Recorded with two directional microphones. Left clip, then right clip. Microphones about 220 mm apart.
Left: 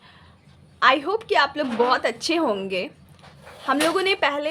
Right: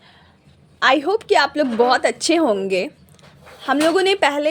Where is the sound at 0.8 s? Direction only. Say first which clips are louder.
Right 3 dB; 20° right (ahead or behind).